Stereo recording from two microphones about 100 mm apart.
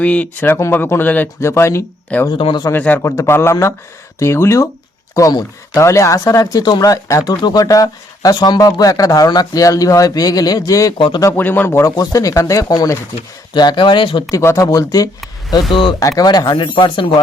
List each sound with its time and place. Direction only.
0.0 s speech: 15° left (ahead or behind)
2.4 s speech: 50° left (ahead or behind)
2.7 s a man's voice: 15° left (ahead or behind)
3.0 s speech: 25° left (ahead or behind)
10.9 s speech: 50° left (ahead or behind)
11.3 s speech: 20° left (ahead or behind)
11.9 s speech: 35° left (ahead or behind); by 14.3 s 55° left (ahead or behind)
14.3 s speech: 35° left (ahead or behind)
15.7 s speech: 55° left (ahead or behind)
16.0 s speech: 40° left (ahead or behind); by 17.1 s 55° left (ahead or behind)